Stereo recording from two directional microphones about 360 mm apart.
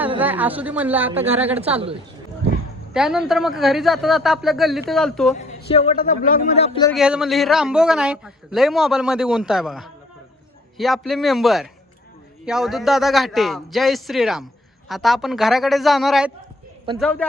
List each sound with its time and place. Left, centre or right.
0.0 s a woman's voice: centre
2.9 s a man's voice: centre
5.3 s speech: centre
6.9 s a man's voice: centre